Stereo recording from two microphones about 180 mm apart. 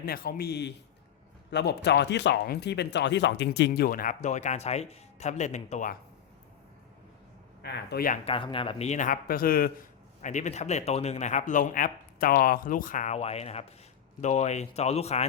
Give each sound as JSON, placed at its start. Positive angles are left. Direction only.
{"t": 0.0, "sound": "speech", "side_deg": 55}
{"t": 7.6, "sound": "speech", "side_deg": 65}
{"t": 8.2, "sound": "speech", "side_deg": 30}
{"t": 10.2, "sound": "speech", "side_deg": 40}